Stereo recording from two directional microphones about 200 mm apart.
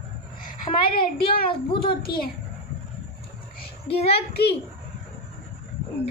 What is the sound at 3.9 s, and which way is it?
Speech, 30° left (ahead or behind).